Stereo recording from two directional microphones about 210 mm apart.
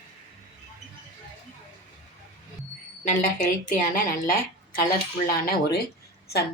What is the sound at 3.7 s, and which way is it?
Speech, 40° left (ahead or behind).